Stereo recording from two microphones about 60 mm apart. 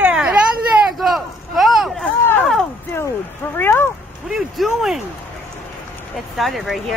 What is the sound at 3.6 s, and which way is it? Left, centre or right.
Speech, left.